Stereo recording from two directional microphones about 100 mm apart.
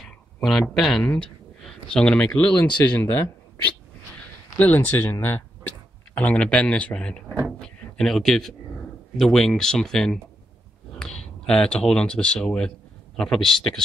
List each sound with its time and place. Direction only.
0.0 s a sound: 5° left (ahead or behind)
1.0 s speech: 15° left (ahead or behind)
4.6 s speech: 15° left (ahead or behind)
6.1 s speech: 10° left (ahead or behind)
7.5 s a sound: 5° left (ahead or behind)
9.2 s speech: 5° left (ahead or behind)